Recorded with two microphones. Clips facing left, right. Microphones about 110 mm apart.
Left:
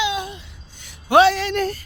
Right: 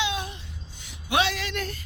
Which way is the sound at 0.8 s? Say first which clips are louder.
Left 11 dB; 45° left (ahead or behind).